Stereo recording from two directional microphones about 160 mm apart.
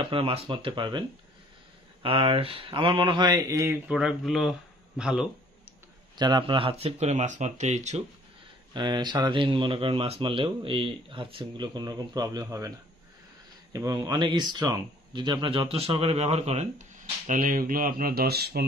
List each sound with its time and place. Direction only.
0.1 s speech: 35° right (ahead or behind)
2.0 s speech: 35° right (ahead or behind); by 5.3 s 5° right (ahead or behind)
6.1 s speech: 25° right (ahead or behind); by 8.0 s 45° right (ahead or behind)
8.7 s speech: 25° right (ahead or behind)
13.7 s speech: 20° right (ahead or behind); by 16.8 s 45° right (ahead or behind)
17.3 s speech: 60° right (ahead or behind); by 18.7 s 85° right